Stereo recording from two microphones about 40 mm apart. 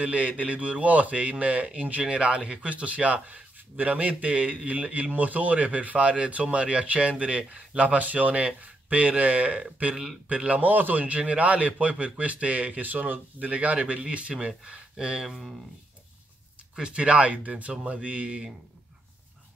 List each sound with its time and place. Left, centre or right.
0.0 s speech: right
9.9 s speech: centre
10.3 s speech: right
13.5 s speech: right
16.7 s speech: right